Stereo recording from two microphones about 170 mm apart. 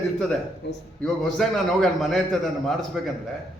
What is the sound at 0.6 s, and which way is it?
Speech, 90° left.